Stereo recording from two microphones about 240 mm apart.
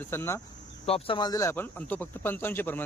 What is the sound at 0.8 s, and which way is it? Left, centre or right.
Speech, left.